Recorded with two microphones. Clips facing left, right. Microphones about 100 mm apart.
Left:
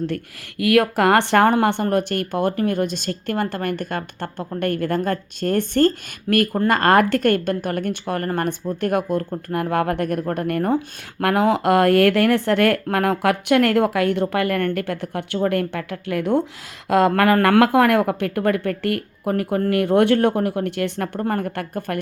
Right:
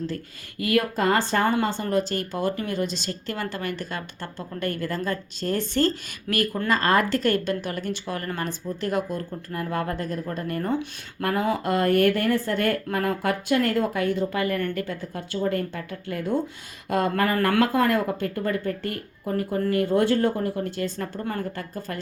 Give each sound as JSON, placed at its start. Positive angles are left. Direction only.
{"t": 0.6, "sound": "speech", "side_deg": 75}
{"t": 1.6, "sound": "a woman's voice", "side_deg": 60}
{"t": 11.2, "sound": "speech", "side_deg": 90}
{"t": 16.9, "sound": "speech", "side_deg": 90}